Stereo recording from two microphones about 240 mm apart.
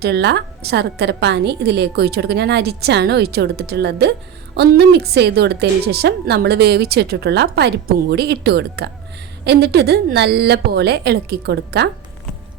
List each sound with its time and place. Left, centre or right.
0.0 s a woman's voice: right